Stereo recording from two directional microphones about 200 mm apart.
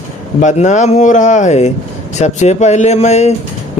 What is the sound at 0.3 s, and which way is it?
Speech, 35° left (ahead or behind).